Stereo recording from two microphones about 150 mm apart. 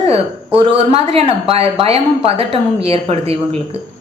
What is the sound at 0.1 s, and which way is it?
A woman's voice, 40° right (ahead or behind).